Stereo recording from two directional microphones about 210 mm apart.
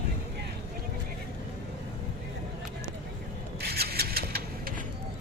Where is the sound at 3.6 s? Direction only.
50° right (ahead or behind).